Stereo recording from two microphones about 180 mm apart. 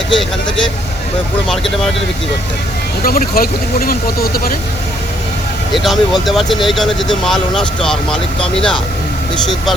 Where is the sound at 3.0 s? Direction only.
55° left (ahead or behind).